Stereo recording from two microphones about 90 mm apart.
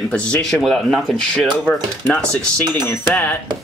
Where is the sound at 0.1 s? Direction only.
10° left (ahead or behind).